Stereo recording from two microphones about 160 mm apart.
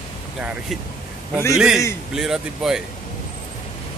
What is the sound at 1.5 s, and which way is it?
Speech, 5° right (ahead or behind).